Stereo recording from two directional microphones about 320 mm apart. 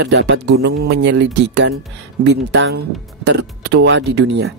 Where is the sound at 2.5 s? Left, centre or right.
Right.